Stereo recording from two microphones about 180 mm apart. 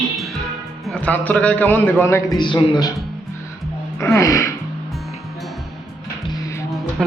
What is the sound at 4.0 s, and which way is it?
Speech, 15° left (ahead or behind).